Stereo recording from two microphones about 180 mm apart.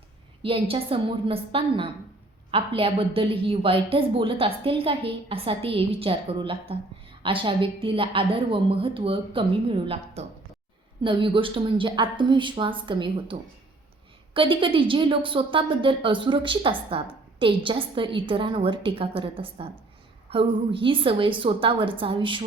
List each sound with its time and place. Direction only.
0.4 s a woman's voice: 30° right (ahead or behind)